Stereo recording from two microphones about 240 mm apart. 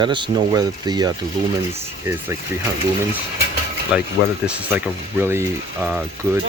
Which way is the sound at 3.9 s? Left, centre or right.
Centre.